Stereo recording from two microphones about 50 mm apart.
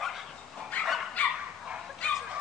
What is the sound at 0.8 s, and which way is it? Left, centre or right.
Dog, left.